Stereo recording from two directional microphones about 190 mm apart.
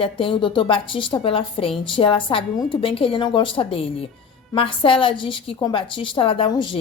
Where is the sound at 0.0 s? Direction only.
25° left (ahead or behind).